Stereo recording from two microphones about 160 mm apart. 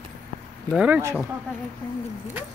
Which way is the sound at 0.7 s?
5° right (ahead or behind).